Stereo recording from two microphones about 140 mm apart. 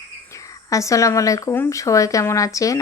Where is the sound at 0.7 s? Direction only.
20° left (ahead or behind).